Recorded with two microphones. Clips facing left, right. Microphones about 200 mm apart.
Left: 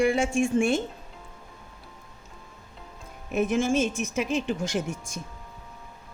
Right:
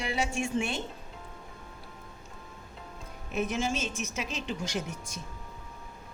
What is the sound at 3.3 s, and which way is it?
A woman's voice, 50° left (ahead or behind).